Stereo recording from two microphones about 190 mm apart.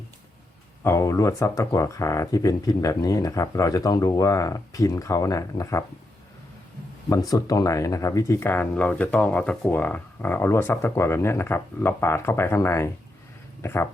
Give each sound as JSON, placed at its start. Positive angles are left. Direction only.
{"t": 0.9, "sound": "speech", "side_deg": 15}
{"t": 7.3, "sound": "speech", "side_deg": 20}